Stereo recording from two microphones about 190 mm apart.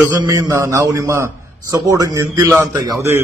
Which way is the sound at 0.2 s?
20° right (ahead or behind).